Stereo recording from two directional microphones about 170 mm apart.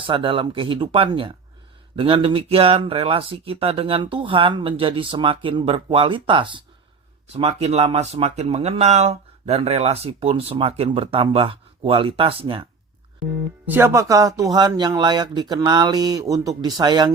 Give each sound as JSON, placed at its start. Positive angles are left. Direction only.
{"t": 0.0, "sound": "speech", "side_deg": -30}
{"t": 13.7, "sound": "speech", "side_deg": -15}